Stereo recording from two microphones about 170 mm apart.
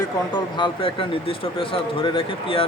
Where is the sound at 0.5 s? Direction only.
30° left (ahead or behind).